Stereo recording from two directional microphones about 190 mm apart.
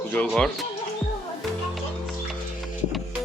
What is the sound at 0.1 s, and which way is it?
Speech, 5° left (ahead or behind).